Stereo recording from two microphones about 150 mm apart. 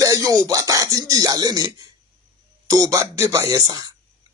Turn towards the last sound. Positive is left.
turn(degrees=-25)  # may be behind; listen again after turning